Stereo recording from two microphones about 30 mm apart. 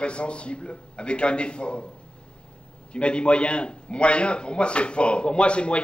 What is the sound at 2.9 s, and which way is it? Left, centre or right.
Speech, left.